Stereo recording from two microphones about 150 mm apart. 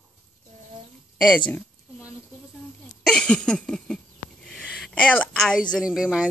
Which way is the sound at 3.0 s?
5° left (ahead or behind).